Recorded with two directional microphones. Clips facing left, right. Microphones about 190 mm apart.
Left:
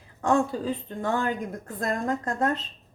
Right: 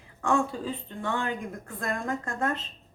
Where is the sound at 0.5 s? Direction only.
40° left (ahead or behind).